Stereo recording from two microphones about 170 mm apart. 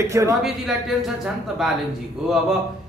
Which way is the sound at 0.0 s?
15° right (ahead or behind).